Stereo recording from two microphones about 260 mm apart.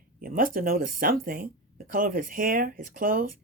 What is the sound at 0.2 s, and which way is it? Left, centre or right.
Speech, right.